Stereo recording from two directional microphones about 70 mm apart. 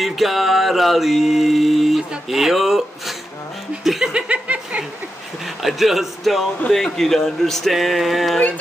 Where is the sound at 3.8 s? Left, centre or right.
Centre.